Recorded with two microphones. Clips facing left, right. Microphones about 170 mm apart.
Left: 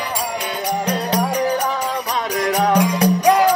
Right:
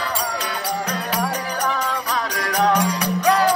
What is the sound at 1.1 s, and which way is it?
Music, 15° left (ahead or behind).